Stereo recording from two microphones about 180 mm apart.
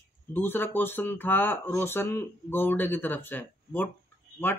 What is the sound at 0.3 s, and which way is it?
Speech, 10° left (ahead or behind).